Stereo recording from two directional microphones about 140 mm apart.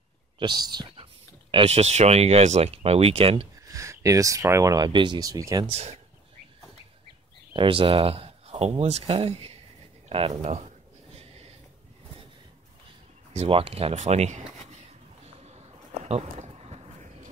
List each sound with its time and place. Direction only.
0.4 s speech: 30° right (ahead or behind)
1.5 s speech: 45° right (ahead or behind)
3.6 s speech: 20° right (ahead or behind)
5.7 s speech: 50° right (ahead or behind)
7.5 s speech: 40° right (ahead or behind)
11.1 s a sound: 45° right (ahead or behind)
13.3 s speech: 45° right (ahead or behind)
15.4 s a sound: 50° right (ahead or behind)